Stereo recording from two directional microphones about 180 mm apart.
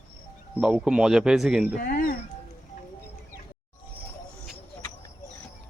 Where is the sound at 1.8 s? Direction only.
55° left (ahead or behind).